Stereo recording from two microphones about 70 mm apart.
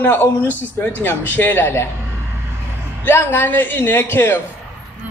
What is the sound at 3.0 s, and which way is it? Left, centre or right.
A man's voice, left.